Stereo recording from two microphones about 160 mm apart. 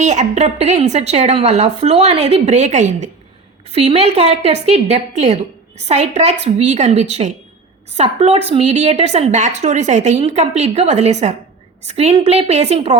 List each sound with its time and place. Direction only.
0.0 s a woman's voice: 45° right (ahead or behind)